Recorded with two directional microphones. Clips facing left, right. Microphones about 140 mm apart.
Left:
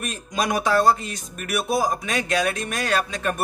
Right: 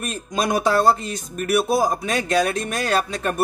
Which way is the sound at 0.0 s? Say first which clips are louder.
Right 2 dB; 35° right (ahead or behind).